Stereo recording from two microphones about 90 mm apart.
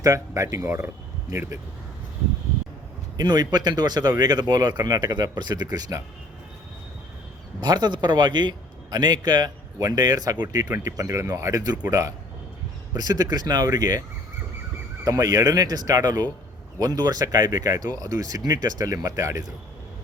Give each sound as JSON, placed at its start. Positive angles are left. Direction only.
{"t": 0.0, "sound": "speech", "side_deg": -40}
{"t": 3.2, "sound": "a man's voice", "side_deg": -50}
{"t": 7.6, "sound": "a man's voice", "side_deg": -50}
{"t": 15.0, "sound": "a man's voice", "side_deg": -40}